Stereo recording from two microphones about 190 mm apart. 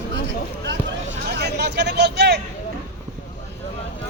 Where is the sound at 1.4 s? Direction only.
60° right (ahead or behind).